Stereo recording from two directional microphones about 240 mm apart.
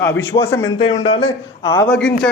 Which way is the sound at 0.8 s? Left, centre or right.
Left.